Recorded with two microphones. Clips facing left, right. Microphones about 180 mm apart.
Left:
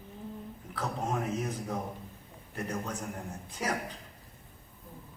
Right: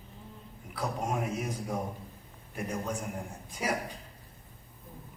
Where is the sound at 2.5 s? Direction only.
10° right (ahead or behind).